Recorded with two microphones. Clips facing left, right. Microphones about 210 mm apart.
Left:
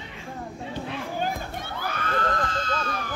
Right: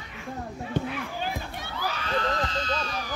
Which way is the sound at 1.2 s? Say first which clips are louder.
Left 3 dB; 50° left (ahead or behind).